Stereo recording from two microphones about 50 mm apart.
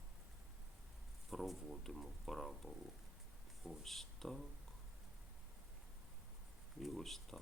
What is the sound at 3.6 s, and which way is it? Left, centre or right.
Speech, centre.